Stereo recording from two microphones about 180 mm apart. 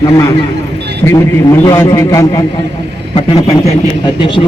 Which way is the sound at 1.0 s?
20° left (ahead or behind).